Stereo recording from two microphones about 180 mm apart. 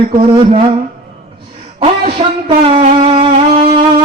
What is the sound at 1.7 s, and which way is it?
Music, 30° right (ahead or behind).